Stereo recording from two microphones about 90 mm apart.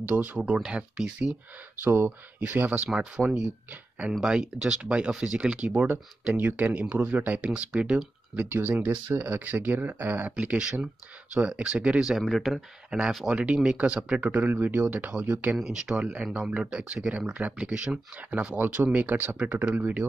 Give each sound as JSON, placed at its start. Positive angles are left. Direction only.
{"t": 0.0, "sound": "speech", "side_deg": -15}
{"t": 1.9, "sound": "speech", "side_deg": -30}
{"t": 2.4, "sound": "speech", "side_deg": -15}